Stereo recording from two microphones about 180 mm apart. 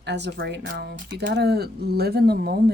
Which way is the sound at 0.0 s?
70° right (ahead or behind).